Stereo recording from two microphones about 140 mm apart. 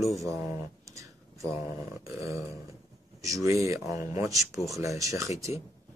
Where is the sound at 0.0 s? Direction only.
25° right (ahead or behind).